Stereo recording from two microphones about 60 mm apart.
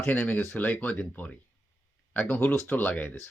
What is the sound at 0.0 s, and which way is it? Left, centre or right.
Speech, left.